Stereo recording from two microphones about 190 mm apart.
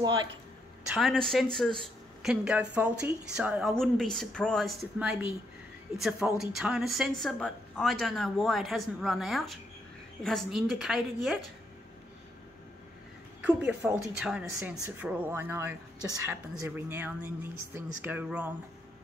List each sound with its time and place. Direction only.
0.0 s speech: 20° right (ahead or behind)
0.8 s a woman's voice: centre (ahead or behind)
13.4 s a woman's voice: 10° right (ahead or behind)